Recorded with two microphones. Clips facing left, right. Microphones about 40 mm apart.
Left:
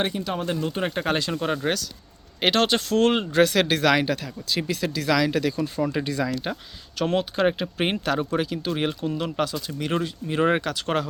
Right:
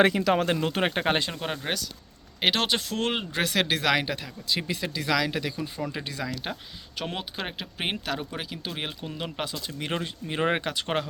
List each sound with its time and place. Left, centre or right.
0.2 s speech: right
0.5 s speech: right
0.9 s speech: right
1.3 s speech: centre
5.8 s speech: centre
7.3 s speech: centre